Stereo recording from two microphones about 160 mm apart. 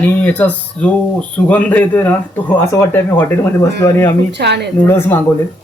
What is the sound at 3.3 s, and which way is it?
Speech, 15° left (ahead or behind).